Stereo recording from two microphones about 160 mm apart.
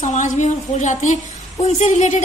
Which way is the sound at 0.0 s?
50° left (ahead or behind).